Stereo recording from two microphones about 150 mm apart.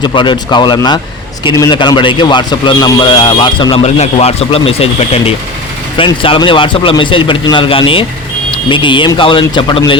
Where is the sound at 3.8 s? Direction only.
45° left (ahead or behind).